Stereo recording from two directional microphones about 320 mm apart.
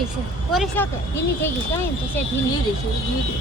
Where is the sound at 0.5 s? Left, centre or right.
Centre.